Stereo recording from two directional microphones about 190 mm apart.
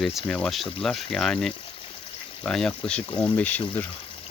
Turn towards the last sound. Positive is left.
turn(degrees=10)  # may be behind; listen again after turning